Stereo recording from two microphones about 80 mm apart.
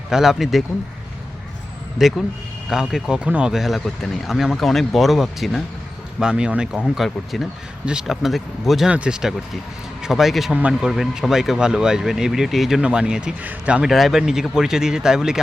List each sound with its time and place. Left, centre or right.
0.1 s speech: centre
2.0 s speech: centre
3.5 s speech: centre
6.1 s speech: centre
8.9 s speech: centre
10.5 s speech: centre
13.8 s speech: centre